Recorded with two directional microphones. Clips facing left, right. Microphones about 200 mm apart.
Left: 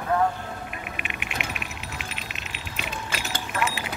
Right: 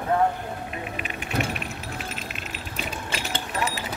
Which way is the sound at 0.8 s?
35° right (ahead or behind).